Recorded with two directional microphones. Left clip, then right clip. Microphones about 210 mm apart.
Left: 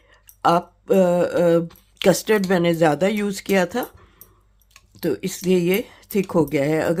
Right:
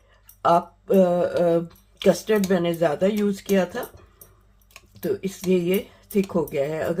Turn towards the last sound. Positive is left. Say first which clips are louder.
# left 4 dB
turn(degrees=55)  # may be behind; listen again after turning